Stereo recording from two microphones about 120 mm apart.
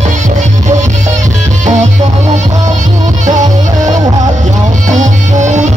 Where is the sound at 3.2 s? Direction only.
90° right.